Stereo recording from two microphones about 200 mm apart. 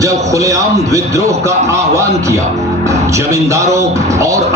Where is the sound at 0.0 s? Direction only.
15° right (ahead or behind).